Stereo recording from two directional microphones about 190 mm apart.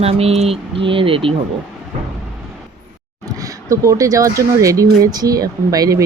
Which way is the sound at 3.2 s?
15° right (ahead or behind).